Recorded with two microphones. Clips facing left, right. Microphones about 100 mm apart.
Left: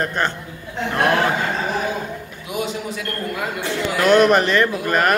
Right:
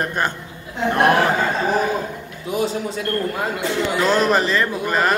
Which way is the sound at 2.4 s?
35° right (ahead or behind).